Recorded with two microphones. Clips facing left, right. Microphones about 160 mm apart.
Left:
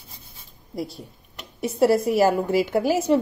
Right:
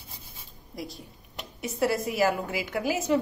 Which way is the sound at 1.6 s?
35° left (ahead or behind).